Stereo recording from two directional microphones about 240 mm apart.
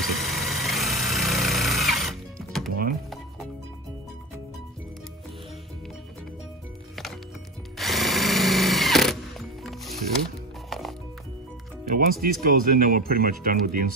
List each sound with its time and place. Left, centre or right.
0.0 s vehicle: centre
7.7 s drill: centre
10.7 s music: centre
11.9 s speech: right